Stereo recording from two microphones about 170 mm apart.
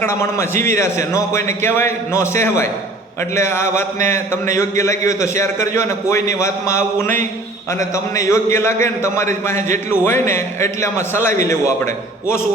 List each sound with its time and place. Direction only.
0.0 s a man's voice: 15° left (ahead or behind)
7.9 s a man's voice: 20° left (ahead or behind)